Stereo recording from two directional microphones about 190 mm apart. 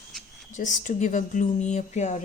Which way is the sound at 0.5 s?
40° left (ahead or behind).